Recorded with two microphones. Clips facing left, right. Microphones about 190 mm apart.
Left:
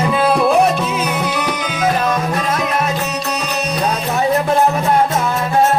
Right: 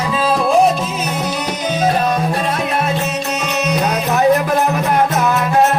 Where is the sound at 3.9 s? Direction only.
60° right (ahead or behind).